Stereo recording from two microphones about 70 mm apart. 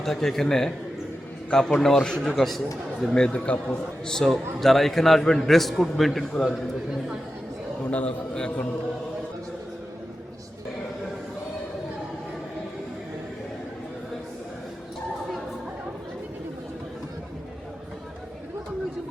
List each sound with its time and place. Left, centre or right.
0.0 s a man's voice: centre
4.0 s a man's voice: centre
7.9 s a man's voice: centre